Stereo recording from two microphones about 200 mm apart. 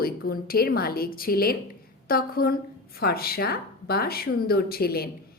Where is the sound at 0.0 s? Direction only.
50° left (ahead or behind).